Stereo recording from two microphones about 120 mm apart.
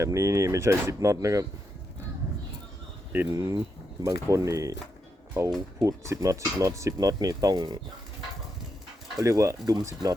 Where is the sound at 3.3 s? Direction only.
30° right (ahead or behind).